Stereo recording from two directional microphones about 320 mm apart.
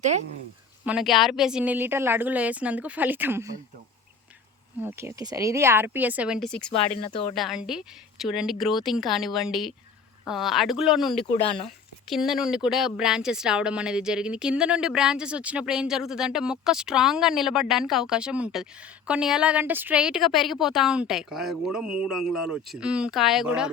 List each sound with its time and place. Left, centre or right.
0.9 s speech: centre
4.8 s speech: centre
6.7 s speech: centre
7.3 s speech: centre